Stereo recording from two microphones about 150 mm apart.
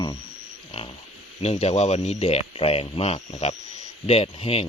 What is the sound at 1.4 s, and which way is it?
Speech, 45° left (ahead or behind).